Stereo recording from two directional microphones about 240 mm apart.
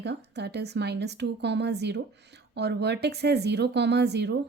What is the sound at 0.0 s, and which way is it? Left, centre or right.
Speech, right.